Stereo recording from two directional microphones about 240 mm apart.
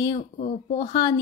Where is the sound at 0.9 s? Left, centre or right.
Centre.